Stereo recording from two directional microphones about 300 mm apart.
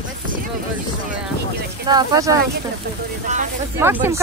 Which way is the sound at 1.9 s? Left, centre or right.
Centre.